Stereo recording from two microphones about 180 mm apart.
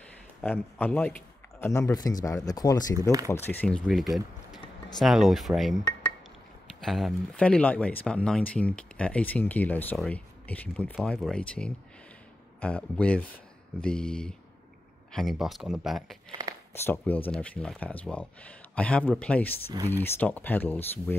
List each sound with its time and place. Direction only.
0.4 s speech: 10° left (ahead or behind)
3.4 s speech: 5° left (ahead or behind)
16.3 s a sound: 20° right (ahead or behind)
16.7 s speech: 15° left (ahead or behind)